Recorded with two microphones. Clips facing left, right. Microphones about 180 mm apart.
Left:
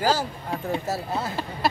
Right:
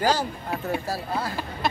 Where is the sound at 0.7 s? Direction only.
20° left (ahead or behind).